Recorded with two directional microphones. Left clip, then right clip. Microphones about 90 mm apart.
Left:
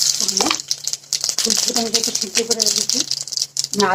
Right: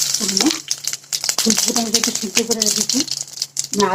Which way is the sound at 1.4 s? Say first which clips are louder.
Right 1 dB; 35° left (ahead or behind).